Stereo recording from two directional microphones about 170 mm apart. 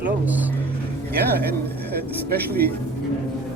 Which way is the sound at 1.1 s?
65° right (ahead or behind).